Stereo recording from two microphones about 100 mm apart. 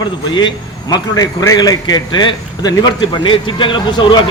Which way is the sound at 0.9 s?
40° left (ahead or behind).